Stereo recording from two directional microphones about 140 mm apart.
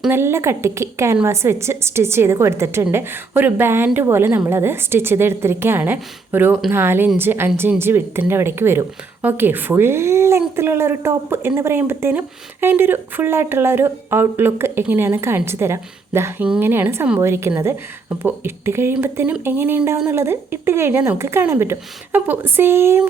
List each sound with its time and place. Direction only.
0.1 s a woman's voice: 20° right (ahead or behind)